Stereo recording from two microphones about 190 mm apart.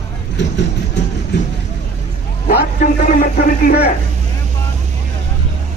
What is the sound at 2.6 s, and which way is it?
Speech, 50° left (ahead or behind).